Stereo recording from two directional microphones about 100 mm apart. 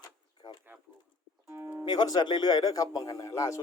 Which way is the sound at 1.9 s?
40° left (ahead or behind).